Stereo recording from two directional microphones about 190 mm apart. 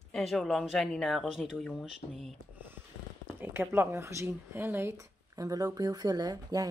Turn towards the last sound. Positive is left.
turn(degrees=-20)  # may be behind; listen again after turning